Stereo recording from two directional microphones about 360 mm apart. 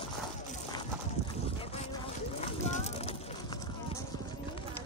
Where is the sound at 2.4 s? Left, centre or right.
Centre.